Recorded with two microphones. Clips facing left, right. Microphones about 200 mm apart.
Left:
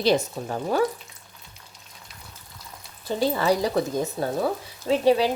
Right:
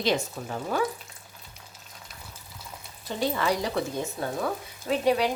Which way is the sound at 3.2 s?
35° left (ahead or behind).